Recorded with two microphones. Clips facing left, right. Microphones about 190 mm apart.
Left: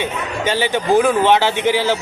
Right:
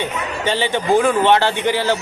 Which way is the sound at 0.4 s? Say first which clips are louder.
Left 1 dB; 5° left (ahead or behind).